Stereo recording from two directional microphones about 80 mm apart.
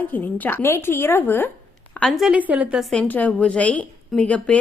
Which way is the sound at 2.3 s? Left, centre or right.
Centre.